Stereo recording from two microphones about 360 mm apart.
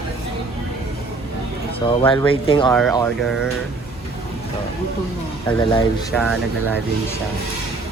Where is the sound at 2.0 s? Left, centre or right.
Centre.